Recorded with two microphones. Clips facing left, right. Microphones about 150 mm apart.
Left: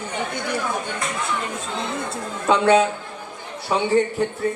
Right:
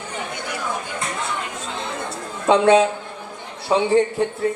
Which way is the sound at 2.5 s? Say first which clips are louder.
Right 2 dB; 30° right (ahead or behind).